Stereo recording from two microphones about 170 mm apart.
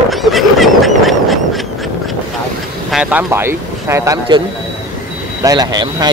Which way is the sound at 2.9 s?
10° right (ahead or behind).